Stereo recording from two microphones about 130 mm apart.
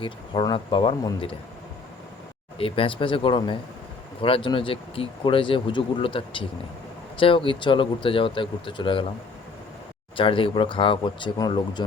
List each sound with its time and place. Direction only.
0.0 s speech: 40° left (ahead or behind)
2.6 s speech: 45° left (ahead or behind)
10.2 s speech: 40° left (ahead or behind)